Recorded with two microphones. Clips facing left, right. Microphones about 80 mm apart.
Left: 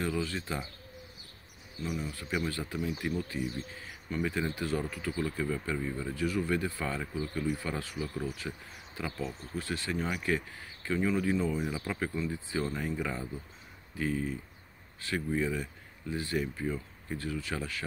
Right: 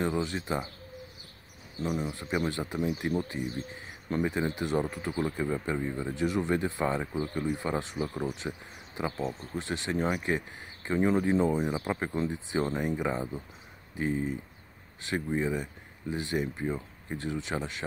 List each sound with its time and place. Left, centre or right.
0.0 s speech: right
2.0 s speech: right